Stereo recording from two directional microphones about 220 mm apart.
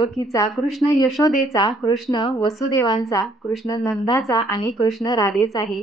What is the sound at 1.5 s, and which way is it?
A woman's voice, 15° left (ahead or behind).